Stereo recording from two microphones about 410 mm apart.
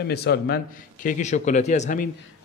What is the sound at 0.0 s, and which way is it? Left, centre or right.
A man's voice, left.